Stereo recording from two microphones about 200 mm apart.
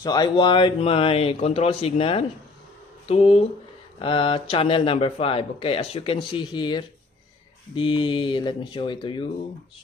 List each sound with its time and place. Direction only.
0.0 s speech: 20° left (ahead or behind)